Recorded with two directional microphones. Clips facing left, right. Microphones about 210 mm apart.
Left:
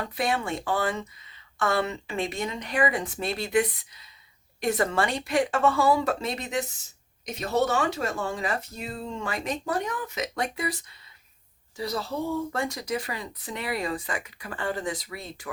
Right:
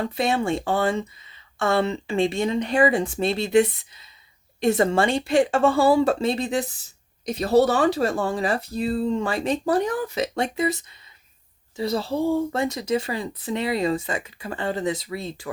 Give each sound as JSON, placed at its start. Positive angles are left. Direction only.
{"t": 0.0, "sound": "speech", "side_deg": -25}